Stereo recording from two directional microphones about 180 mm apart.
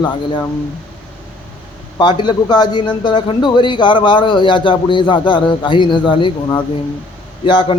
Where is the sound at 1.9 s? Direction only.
25° left (ahead or behind).